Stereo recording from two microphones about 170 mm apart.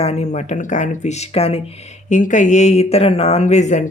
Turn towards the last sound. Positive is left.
turn(degrees=45)  # may be behind; listen again after turning